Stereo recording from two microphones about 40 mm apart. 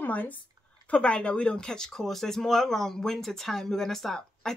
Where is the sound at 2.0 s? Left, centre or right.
Centre.